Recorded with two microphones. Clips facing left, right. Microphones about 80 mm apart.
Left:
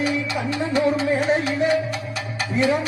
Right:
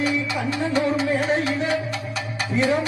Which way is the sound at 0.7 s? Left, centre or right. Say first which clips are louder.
Left 2 dB; left.